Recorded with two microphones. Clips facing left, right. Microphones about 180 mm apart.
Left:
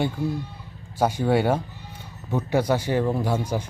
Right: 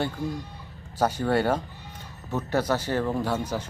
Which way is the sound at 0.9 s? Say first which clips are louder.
Left 2 dB; 10° left (ahead or behind).